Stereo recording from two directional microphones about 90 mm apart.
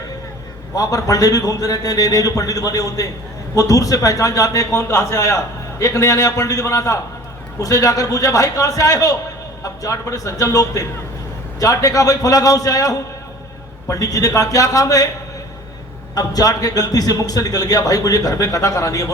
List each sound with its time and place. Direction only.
0.8 s a man's voice: 40° left (ahead or behind)
16.1 s a man's voice: 45° left (ahead or behind)